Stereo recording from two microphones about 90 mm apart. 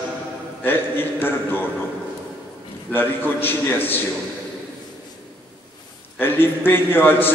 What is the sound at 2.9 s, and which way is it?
A man's voice, 20° left (ahead or behind).